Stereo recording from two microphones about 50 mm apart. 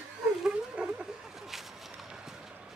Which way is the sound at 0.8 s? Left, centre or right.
Right.